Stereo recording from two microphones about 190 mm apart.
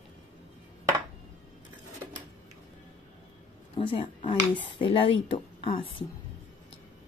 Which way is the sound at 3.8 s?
25° left (ahead or behind).